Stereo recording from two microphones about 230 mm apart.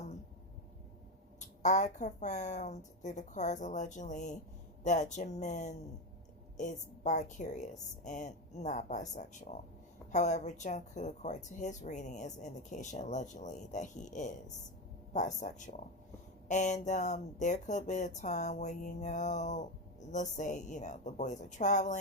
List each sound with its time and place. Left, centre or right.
1.4 s speech: left